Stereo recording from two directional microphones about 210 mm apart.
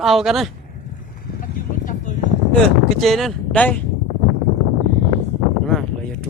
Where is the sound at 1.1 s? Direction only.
40° left (ahead or behind).